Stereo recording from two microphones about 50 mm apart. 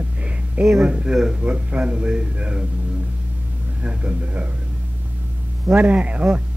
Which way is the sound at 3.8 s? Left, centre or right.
Right.